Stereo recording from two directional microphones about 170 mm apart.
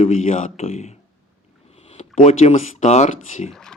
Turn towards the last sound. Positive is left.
turn(degrees=45)  # may be behind; listen again after turning